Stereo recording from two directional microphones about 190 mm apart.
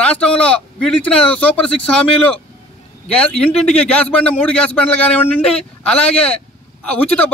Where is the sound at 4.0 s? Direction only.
5° left (ahead or behind).